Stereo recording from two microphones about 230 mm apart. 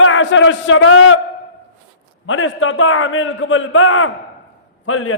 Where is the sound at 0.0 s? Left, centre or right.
Left.